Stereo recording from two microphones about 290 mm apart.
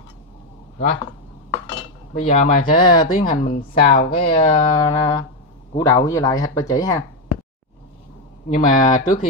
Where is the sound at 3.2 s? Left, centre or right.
Left.